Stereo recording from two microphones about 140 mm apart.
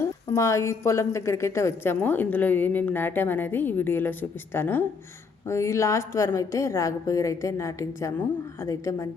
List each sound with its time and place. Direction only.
0.0 s a woman's voice: 20° left (ahead or behind)